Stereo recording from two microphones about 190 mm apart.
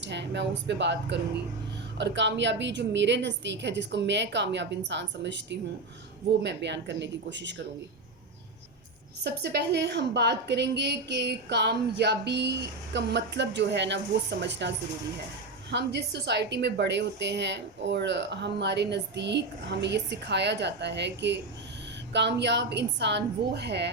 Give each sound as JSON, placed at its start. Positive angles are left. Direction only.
{"t": 0.0, "sound": "a woman's voice", "side_deg": -65}
{"t": 9.2, "sound": "a woman's voice", "side_deg": -60}
{"t": 15.7, "sound": "a woman's voice", "side_deg": -65}